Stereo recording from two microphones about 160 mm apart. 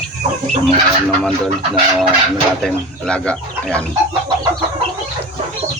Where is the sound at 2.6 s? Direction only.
5° left (ahead or behind).